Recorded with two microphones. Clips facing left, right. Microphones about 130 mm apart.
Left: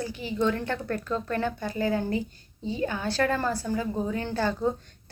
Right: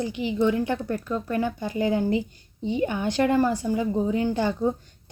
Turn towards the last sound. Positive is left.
turn(degrees=-15)  # may be behind; listen again after turning